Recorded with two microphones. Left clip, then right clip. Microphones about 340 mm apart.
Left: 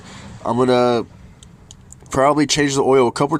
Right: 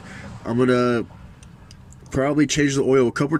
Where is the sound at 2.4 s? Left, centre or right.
Centre.